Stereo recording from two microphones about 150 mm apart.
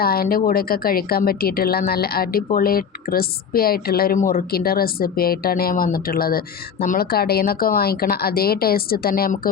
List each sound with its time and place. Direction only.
0.0 s a woman's voice: 90° left